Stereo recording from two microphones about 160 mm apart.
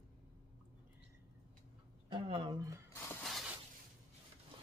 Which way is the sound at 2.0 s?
35° right (ahead or behind).